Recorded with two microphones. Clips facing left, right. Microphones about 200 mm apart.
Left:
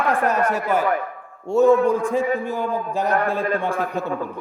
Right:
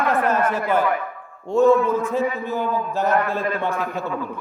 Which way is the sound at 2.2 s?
50° left (ahead or behind).